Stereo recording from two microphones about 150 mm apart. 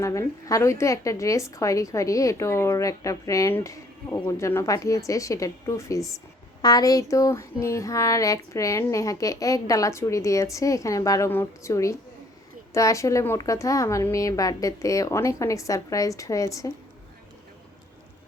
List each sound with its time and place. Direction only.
0.0 s a woman's voice: 20° left (ahead or behind)